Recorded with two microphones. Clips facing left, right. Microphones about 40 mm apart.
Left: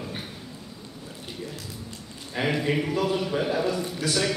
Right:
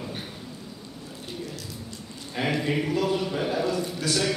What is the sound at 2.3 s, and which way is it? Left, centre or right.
A man's voice, centre.